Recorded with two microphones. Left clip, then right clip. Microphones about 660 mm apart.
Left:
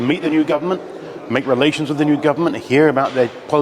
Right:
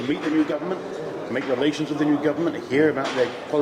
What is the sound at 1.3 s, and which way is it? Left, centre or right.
A man's voice, left.